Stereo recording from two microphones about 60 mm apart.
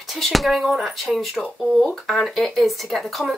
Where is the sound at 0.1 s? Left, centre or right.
Centre.